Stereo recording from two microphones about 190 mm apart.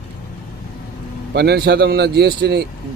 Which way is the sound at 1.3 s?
60° right (ahead or behind).